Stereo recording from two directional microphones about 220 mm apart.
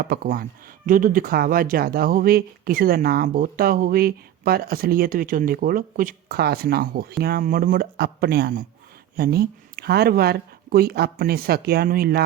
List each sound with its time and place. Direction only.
0.0 s speech: 40° right (ahead or behind)